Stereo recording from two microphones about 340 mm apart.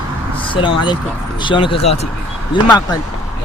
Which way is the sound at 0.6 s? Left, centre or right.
Centre.